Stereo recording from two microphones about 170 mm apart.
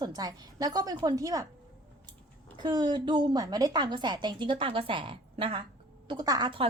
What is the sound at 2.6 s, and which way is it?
A woman's voice, 25° right (ahead or behind).